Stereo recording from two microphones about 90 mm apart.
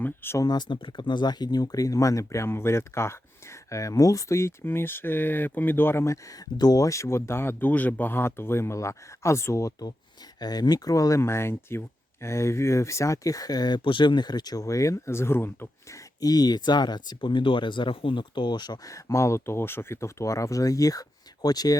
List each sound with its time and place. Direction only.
0.0 s speech: 25° left (ahead or behind)
0.3 s speech: 50° left (ahead or behind)
0.8 s speech: 65° left (ahead or behind); by 9.9 s 35° left (ahead or behind)
10.4 s speech: 50° left (ahead or behind); by 16.0 s 25° left (ahead or behind)
16.0 s speech: 45° left (ahead or behind)